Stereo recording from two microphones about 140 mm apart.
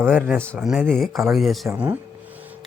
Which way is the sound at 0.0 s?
10° right (ahead or behind).